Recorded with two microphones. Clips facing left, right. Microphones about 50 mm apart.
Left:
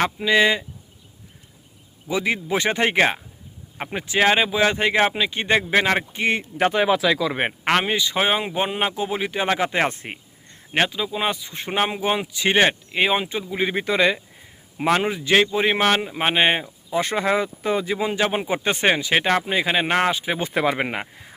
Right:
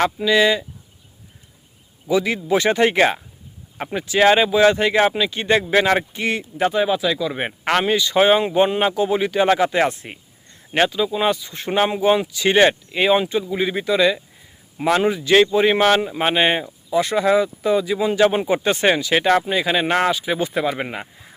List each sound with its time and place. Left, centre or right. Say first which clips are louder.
0.3 s speech: right 1 dB; left
2.0 s speech: right 4 dB; left
4.2 s speech: right 4 dB; centre
6.1 s speech: left 1 dB; left
6.6 s speech: right 1 dB; left
7.6 s speech: right 3 dB; centre
9.9 s speech: left 2 dB; left
10.7 s speech: right 4 dB; centre
13.7 s speech: right 1 dB; left
14.8 s speech: right 3 dB; centre
16.9 s speech: right 4 dB; left
18.0 s speech: right 5 dB; centre
18.6 s speech: right 2 dB; left
20.4 s speech: even; left